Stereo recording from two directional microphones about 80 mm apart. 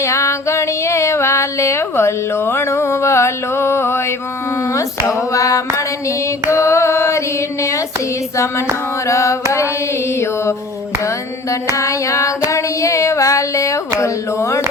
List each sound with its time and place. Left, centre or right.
0.0 s female singing: left
4.7 s a sound: left
6.5 s carnatic music: left
9.0 s carnatic music: left
11.7 s child singing: left
14.0 s carnatic music: left